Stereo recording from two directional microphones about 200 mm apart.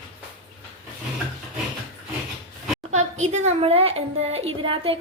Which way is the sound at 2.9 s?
35° right (ahead or behind).